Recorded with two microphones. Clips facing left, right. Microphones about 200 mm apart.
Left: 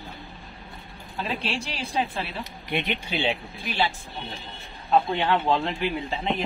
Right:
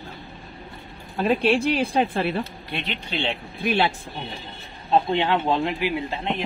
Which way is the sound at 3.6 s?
60° right (ahead or behind).